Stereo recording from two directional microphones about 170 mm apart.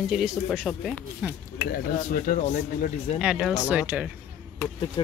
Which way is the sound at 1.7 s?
55° left (ahead or behind).